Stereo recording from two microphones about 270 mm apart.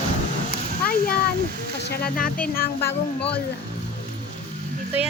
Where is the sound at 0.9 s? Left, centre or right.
Left.